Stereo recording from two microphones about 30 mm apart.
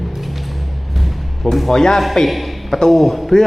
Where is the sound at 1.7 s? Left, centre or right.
Centre.